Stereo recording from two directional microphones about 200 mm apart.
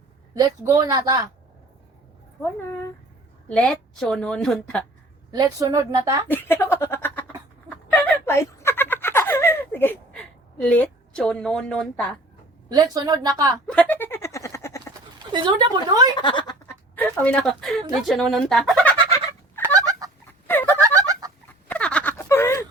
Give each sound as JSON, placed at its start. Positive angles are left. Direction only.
{"t": 0.3, "sound": "speech", "side_deg": -15}
{"t": 3.5, "sound": "a woman's voice", "side_deg": 5}
{"t": 5.3, "sound": "speech", "side_deg": -20}
{"t": 6.2, "sound": "a sound", "side_deg": 10}
{"t": 10.6, "sound": "a woman's voice", "side_deg": 5}
{"t": 12.6, "sound": "speech", "side_deg": -20}
{"t": 13.7, "sound": "a sound", "side_deg": 5}
{"t": 15.3, "sound": "speech", "side_deg": -20}
{"t": 16.1, "sound": "speech", "side_deg": 25}
{"t": 16.6, "sound": "speech", "side_deg": 10}
{"t": 18.0, "sound": "fowl", "side_deg": 0}
{"t": 19.8, "sound": "fowl", "side_deg": -20}
{"t": 21.1, "sound": "fowl", "side_deg": -20}
{"t": 21.7, "sound": "a sound", "side_deg": 5}